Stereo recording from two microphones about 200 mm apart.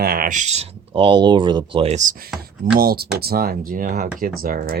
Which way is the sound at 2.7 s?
50° right (ahead or behind).